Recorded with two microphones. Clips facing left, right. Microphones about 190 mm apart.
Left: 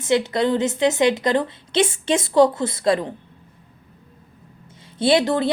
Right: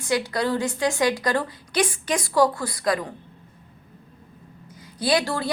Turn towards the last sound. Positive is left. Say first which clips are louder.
# left 5 dB
turn(degrees=20)  # may be behind; listen again after turning